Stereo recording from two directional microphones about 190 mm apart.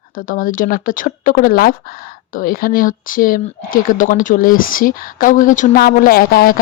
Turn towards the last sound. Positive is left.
turn(degrees=50)  # may be behind; listen again after turning